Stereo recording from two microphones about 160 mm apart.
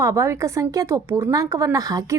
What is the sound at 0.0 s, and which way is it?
A woman's voice, 20° right (ahead or behind).